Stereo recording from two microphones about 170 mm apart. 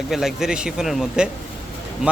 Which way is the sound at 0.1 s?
Centre (ahead or behind).